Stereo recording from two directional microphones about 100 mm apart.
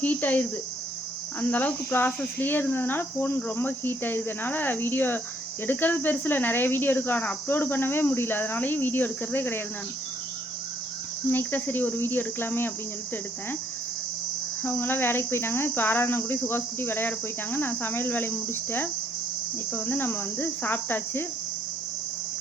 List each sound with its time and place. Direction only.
0.0 s speech: 15° left (ahead or behind)
1.4 s cricket: 20° left (ahead or behind)
11.3 s cricket: 20° left (ahead or behind)
14.6 s cricket: 20° left (ahead or behind)